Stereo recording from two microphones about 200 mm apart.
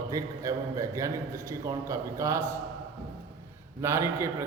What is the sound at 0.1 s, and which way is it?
A man's voice, 15° right (ahead or behind).